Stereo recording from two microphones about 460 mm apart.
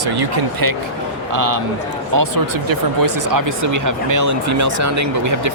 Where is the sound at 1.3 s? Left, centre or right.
Right.